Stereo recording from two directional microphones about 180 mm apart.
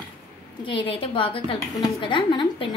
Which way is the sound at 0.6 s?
30° left (ahead or behind).